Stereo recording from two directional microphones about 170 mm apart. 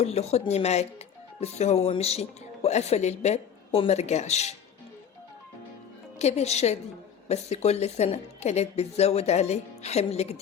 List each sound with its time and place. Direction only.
0.0 s speech: 40° left (ahead or behind)
6.1 s speech: 40° left (ahead or behind)